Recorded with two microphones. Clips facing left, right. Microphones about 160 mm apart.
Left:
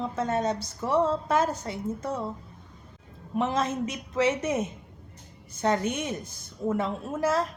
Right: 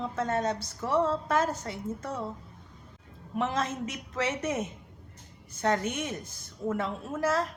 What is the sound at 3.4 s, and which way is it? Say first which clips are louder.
A woman's voice: left 3 dB; 20° left (ahead or behind).